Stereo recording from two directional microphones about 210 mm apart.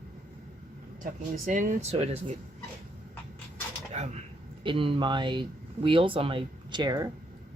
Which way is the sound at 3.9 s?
30° right (ahead or behind).